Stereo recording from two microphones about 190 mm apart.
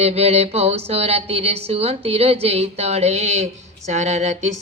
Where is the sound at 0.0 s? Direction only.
35° right (ahead or behind).